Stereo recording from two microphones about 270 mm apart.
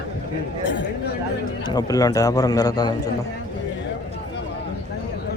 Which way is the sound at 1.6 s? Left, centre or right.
Centre.